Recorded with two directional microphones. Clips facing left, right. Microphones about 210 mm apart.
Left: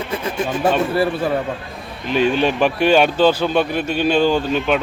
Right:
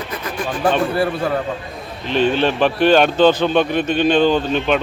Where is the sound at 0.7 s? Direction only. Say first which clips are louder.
Right 1 dB; 5° left (ahead or behind).